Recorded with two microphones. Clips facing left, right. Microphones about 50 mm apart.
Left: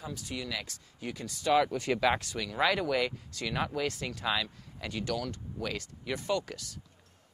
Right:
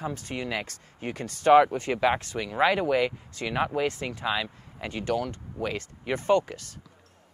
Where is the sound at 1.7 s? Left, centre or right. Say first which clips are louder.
Right 3 dB; right.